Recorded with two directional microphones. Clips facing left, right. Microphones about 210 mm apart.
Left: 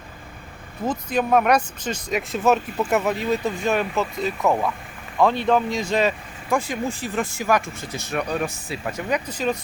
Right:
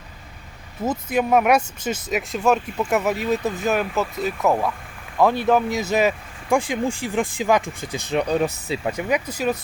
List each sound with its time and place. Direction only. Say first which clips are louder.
0.9 s speech: right 1 dB; 10° right (ahead or behind)